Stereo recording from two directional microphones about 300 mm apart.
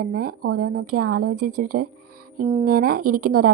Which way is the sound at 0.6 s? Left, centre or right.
Right.